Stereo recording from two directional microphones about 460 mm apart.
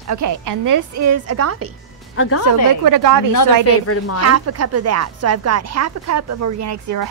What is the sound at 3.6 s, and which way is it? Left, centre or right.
Speech, left.